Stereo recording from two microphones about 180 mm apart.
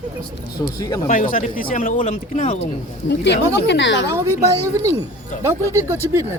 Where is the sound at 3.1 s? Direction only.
75° left (ahead or behind).